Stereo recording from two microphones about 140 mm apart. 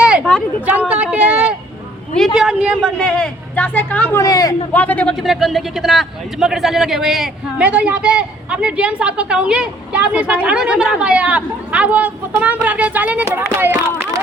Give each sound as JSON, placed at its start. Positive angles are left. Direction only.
{"t": 0.0, "sound": "a sound", "side_deg": -10}
{"t": 2.1, "sound": "a woman's voice", "side_deg": 0}
{"t": 3.0, "sound": "speech", "side_deg": 10}
{"t": 4.2, "sound": "speech", "side_deg": 25}
{"t": 4.7, "sound": "speech", "side_deg": 10}
{"t": 5.2, "sound": "a man's voice", "side_deg": 0}